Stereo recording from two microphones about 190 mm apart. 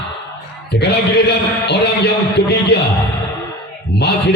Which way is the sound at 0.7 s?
60° left (ahead or behind).